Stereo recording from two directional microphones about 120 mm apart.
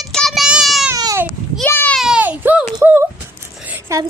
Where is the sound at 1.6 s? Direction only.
15° left (ahead or behind).